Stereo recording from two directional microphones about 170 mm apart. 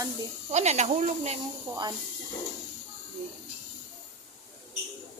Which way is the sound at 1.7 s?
25° right (ahead or behind).